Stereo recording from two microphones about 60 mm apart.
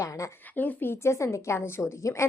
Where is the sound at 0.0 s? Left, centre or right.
Left.